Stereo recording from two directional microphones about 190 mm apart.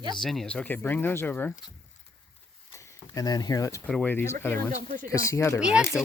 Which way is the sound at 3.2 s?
20° left (ahead or behind).